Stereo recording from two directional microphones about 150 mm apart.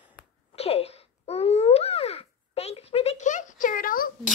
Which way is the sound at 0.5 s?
40° left (ahead or behind).